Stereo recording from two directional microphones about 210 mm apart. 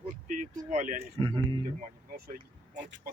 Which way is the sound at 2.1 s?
45° right (ahead or behind).